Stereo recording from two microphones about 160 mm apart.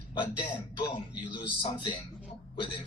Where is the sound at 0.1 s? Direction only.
30° left (ahead or behind).